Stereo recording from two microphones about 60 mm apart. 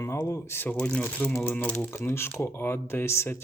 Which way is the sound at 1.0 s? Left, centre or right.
Left.